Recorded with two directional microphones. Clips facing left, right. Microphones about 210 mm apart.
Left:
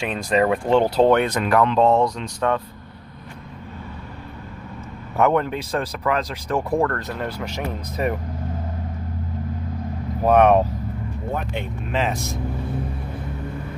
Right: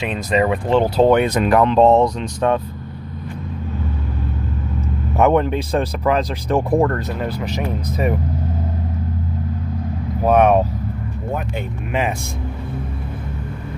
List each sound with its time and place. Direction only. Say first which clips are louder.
0.0 s speech: right 1 dB; 5° right (ahead or behind)
1.3 s speech: right 4 dB; 20° right (ahead or behind)
5.1 s speech: right 4 dB; 20° right (ahead or behind)
10.2 s speech: right 1 dB; 5° right (ahead or behind)